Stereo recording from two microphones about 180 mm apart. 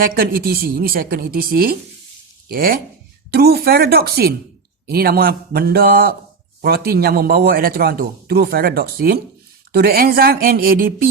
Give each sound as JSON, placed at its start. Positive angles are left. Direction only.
{"t": 0.0, "sound": "a man's voice", "side_deg": -55}